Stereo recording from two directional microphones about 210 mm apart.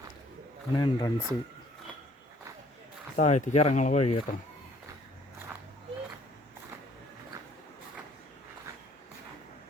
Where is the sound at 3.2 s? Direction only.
35° left (ahead or behind).